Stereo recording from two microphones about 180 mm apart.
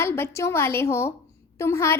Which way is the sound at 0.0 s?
15° left (ahead or behind).